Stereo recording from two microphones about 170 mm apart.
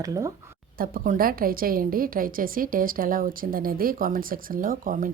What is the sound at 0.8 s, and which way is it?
A woman's voice, 55° right (ahead or behind).